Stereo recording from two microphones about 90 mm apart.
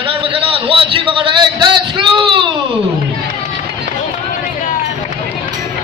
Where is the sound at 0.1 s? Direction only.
85° right; by 2.4 s 65° right (ahead or behind).